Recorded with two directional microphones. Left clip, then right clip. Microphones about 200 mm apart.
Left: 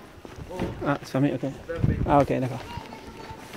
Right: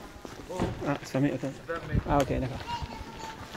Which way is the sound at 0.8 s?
20° left (ahead or behind).